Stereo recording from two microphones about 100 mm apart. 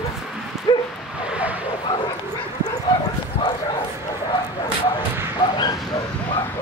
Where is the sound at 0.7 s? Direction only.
50° left (ahead or behind).